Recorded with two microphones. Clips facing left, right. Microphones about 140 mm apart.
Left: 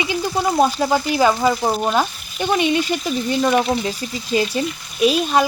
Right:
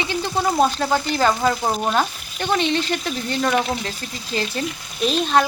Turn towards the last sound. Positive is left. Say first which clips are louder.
# left 2 dB
turn(degrees=10)  # may be behind; listen again after turning